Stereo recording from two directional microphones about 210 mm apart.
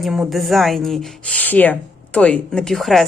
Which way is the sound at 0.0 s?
Centre (ahead or behind).